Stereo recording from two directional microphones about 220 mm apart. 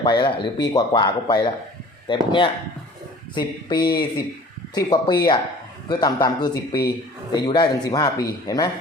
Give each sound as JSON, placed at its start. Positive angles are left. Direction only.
{"t": 0.0, "sound": "speech", "side_deg": 20}